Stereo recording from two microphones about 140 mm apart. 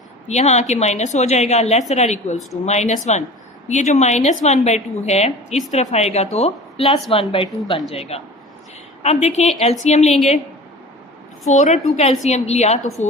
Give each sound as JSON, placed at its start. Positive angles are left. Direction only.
{"t": 0.3, "sound": "a woman's voice", "side_deg": 55}
{"t": 11.4, "sound": "a woman's voice", "side_deg": 55}